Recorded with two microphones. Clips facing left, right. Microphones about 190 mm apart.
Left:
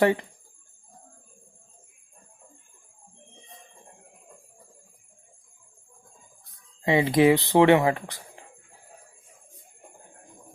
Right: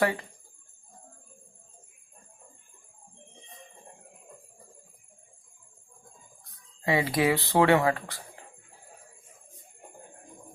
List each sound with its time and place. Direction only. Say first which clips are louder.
0.0 s speech: left 5 dB; 20° left (ahead or behind)
6.8 s speech: left 6 dB; 20° left (ahead or behind)